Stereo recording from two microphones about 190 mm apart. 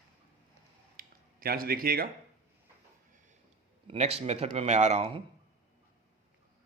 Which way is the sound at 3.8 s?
30° right (ahead or behind).